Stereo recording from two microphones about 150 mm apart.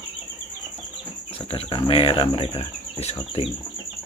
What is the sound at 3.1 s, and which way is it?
Speech, 40° left (ahead or behind).